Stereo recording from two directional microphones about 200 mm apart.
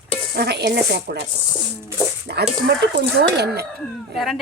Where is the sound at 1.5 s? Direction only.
10° right (ahead or behind).